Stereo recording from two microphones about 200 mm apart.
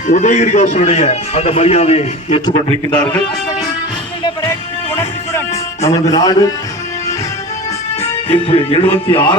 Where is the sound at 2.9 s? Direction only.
10° left (ahead or behind).